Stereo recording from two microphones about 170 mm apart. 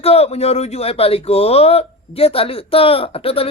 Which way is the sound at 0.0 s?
35° left (ahead or behind).